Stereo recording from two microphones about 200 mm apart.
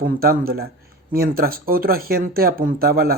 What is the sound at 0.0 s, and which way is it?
A man's voice, 50° right (ahead or behind).